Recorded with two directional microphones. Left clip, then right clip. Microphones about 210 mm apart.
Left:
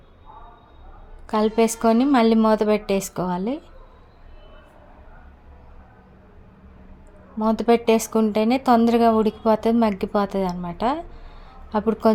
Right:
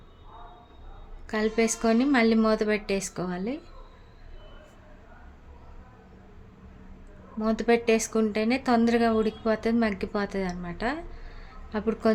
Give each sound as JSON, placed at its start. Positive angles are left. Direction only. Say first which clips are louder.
{"t": 1.3, "sound": "speech", "louder": "left 6 dB", "side_deg": 25}
{"t": 7.3, "sound": "speech", "louder": "left 5 dB", "side_deg": 20}